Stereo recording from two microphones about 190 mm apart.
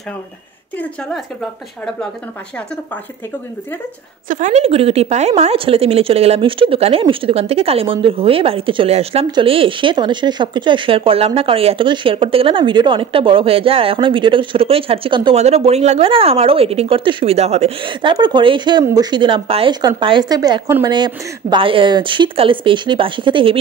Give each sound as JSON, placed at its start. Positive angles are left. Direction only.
{"t": 4.3, "sound": "a woman's voice", "side_deg": -40}